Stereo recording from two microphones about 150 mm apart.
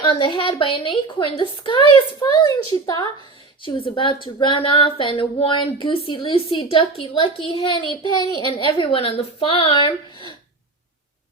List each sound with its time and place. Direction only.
0.0 s a woman's voice: 30° left (ahead or behind)
3.6 s a woman's voice: 35° left (ahead or behind)